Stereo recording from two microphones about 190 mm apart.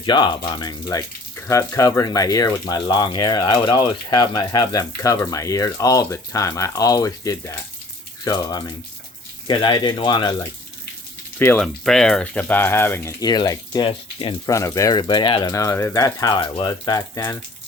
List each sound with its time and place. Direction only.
0.0 s speech: 25° left (ahead or behind)
11.3 s speech: 10° left (ahead or behind); by 14.5 s 25° left (ahead or behind)
14.5 s speech: 15° left (ahead or behind)